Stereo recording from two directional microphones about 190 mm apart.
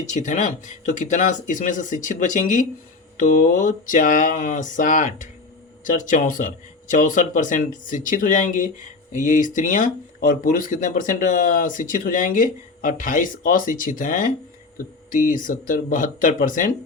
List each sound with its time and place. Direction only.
0.0 s speech: 40° left (ahead or behind)